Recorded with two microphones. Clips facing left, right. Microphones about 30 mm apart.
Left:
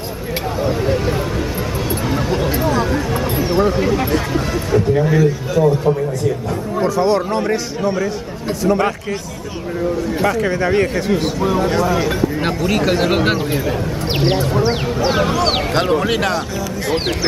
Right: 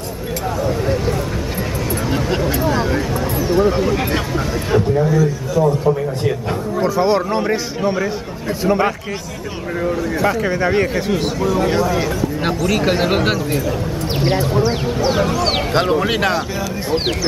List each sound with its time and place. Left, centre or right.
2.7 s a sound: centre
3.3 s a sound: left
5.0 s speech: left
6.8 s a man's voice: centre
10.2 s speech: centre
12.4 s speech: centre
12.8 s speech: centre
13.7 s speech: left
15.0 s speech: centre